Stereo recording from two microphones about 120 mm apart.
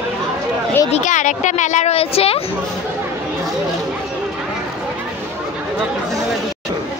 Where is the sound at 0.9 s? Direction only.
90° left; by 2.4 s 55° left (ahead or behind).